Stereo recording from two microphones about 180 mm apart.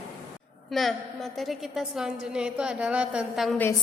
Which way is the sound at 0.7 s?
Centre (ahead or behind).